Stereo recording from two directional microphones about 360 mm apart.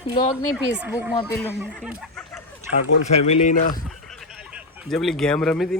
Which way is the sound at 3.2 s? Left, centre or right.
Left.